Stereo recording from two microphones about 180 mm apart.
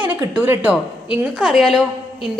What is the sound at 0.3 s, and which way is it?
A woman's voice, 10° right (ahead or behind).